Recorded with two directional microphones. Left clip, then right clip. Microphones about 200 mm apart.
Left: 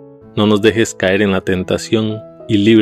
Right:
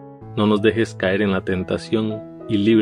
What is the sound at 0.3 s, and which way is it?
Speech, 40° left (ahead or behind).